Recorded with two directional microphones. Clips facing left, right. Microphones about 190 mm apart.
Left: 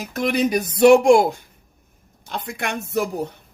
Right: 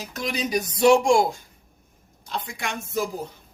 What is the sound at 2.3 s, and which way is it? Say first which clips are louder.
Speech: left 4 dB; 55° left (ahead or behind).